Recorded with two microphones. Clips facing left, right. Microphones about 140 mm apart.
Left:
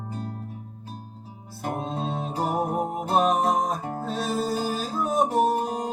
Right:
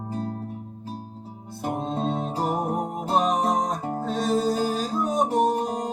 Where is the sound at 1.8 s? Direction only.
Centre (ahead or behind).